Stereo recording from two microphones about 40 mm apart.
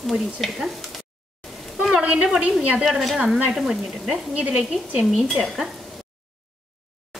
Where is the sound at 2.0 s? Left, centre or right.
Right.